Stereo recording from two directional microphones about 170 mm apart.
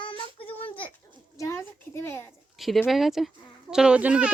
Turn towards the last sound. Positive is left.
turn(degrees=-5)  # may be behind; listen again after turning